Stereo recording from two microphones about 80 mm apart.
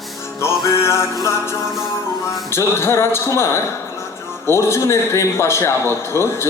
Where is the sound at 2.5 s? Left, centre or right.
Left.